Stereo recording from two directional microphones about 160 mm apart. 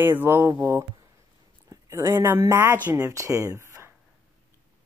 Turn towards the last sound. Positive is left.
turn(degrees=-15)  # may be behind; listen again after turning